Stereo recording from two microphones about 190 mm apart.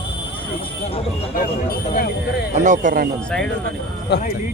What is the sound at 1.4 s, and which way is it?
Speech, 50° left (ahead or behind).